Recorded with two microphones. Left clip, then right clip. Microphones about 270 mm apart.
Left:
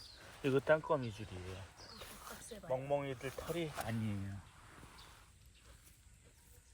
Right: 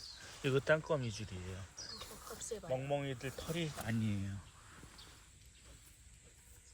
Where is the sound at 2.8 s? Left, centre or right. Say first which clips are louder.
Left 1 dB; centre.